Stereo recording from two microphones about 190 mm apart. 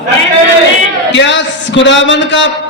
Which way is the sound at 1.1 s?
70° left (ahead or behind).